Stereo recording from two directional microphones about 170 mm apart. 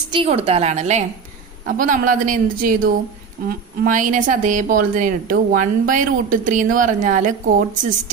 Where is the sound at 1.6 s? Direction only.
50° right (ahead or behind).